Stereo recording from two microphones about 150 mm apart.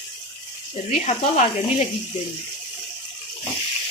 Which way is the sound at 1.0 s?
50° left (ahead or behind).